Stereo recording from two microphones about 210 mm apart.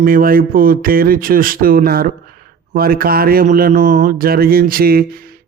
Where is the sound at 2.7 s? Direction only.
45° right (ahead or behind).